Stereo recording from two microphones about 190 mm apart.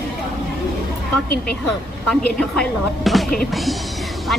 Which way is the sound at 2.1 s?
5° left (ahead or behind).